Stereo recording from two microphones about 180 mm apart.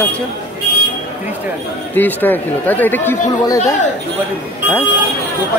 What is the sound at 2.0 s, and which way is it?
Speech, 10° left (ahead or behind).